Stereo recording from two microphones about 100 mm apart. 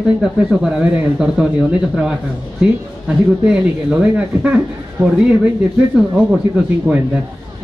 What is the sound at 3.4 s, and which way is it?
Speech, 10° right (ahead or behind).